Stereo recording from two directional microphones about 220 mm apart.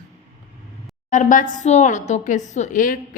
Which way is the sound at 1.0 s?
35° left (ahead or behind).